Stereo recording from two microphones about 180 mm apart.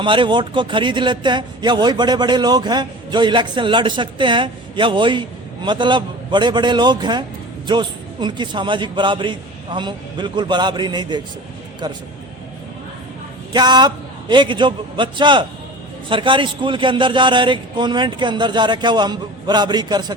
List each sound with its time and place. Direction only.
0.0 s speech: 25° right (ahead or behind)
13.5 s speech: 25° right (ahead or behind)